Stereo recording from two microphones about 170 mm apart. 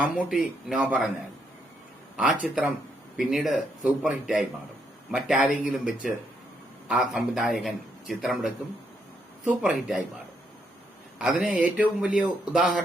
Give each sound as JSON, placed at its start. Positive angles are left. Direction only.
{"t": 0.0, "sound": "a man's voice", "side_deg": 0}
{"t": 2.1, "sound": "a man's voice", "side_deg": -5}
{"t": 9.6, "sound": "a man's voice", "side_deg": 0}
{"t": 11.2, "sound": "a man's voice", "side_deg": -5}